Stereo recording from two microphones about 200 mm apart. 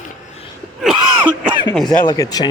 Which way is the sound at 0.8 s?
5° right (ahead or behind).